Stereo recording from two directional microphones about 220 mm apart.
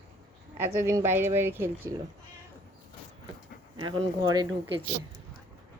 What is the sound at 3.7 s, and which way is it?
Speech, 20° right (ahead or behind).